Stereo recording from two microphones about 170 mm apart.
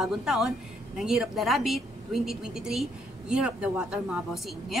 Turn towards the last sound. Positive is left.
turn(degrees=0)  # may be behind; listen again after turning